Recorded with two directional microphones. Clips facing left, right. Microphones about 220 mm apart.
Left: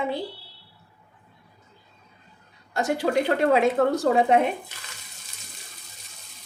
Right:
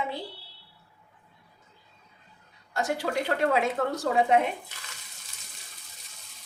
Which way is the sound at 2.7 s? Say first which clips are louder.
Left 5 dB; 20° left (ahead or behind).